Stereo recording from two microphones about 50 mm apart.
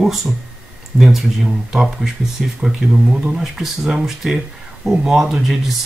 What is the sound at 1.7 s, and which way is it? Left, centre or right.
Speech, centre.